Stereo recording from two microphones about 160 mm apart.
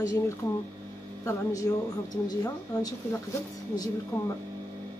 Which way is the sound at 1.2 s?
20° left (ahead or behind).